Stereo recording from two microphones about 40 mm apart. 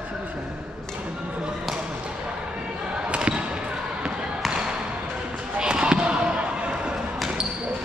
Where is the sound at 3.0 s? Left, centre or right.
Right.